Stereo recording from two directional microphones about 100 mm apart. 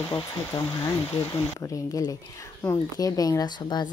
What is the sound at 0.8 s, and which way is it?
Speech, 35° left (ahead or behind).